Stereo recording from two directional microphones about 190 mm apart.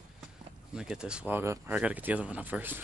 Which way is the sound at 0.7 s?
5° right (ahead or behind).